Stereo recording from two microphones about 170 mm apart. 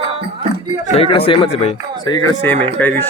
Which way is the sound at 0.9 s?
35° left (ahead or behind).